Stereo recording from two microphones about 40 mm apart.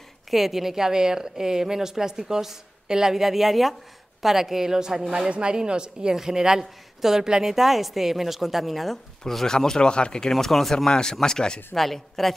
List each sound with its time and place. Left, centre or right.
0.3 s a woman's voice: centre
7.5 s a woman's voice: centre; by 10.3 s left
10.3 s a woman's voice: centre
10.9 s speech: centre
11.7 s a woman's voice: centre